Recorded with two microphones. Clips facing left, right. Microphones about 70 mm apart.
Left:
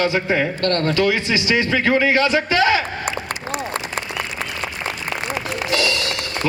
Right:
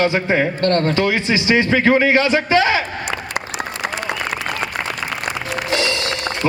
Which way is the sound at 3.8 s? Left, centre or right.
Right.